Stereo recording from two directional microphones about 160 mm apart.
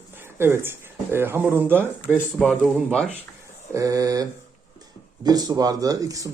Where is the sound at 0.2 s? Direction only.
15° right (ahead or behind).